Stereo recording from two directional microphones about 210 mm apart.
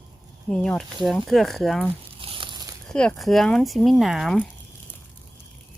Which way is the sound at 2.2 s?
25° right (ahead or behind).